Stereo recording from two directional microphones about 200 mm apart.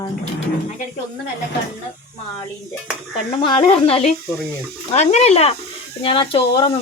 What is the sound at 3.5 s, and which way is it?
Speech, 30° left (ahead or behind).